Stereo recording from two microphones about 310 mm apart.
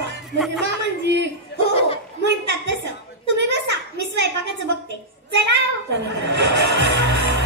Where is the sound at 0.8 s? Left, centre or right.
Right.